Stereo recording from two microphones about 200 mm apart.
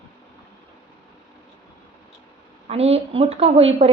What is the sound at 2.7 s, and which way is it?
A woman's voice, 30° right (ahead or behind).